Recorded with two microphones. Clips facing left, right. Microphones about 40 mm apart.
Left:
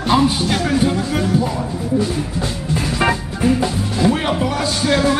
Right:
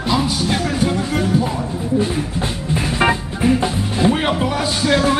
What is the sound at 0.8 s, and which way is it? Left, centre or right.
Speech, centre.